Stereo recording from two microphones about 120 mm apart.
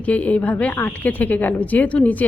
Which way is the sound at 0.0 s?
10° left (ahead or behind).